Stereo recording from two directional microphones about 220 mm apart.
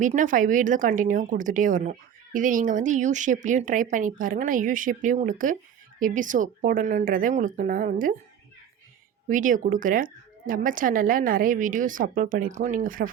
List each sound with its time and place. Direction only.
0.0 s speech: 35° right (ahead or behind)
9.3 s speech: 35° right (ahead or behind)